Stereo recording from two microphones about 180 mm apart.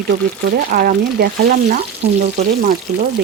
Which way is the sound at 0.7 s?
55° right (ahead or behind).